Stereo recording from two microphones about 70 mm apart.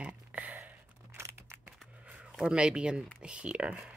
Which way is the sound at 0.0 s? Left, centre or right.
Right.